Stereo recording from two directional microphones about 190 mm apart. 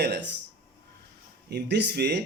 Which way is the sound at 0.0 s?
60° right (ahead or behind).